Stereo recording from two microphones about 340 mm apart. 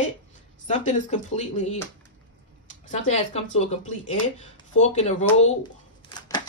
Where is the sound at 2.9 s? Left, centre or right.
Centre.